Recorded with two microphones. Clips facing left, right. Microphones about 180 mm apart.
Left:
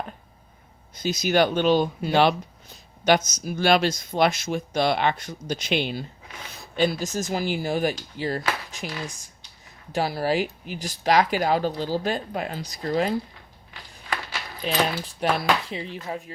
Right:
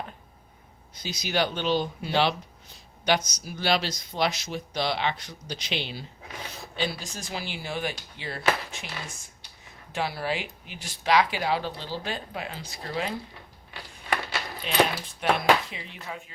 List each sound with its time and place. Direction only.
1.0 s speech: 50° left (ahead or behind)
9.9 s speech: 40° left (ahead or behind)
14.6 s speech: 40° left (ahead or behind)